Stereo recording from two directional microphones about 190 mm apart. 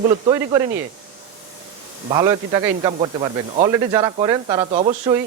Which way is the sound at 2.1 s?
20° right (ahead or behind).